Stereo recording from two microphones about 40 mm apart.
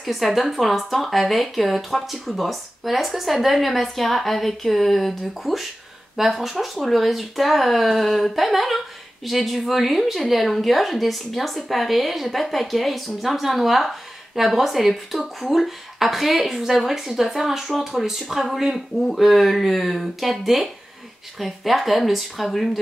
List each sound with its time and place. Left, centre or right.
0.0 s speech: centre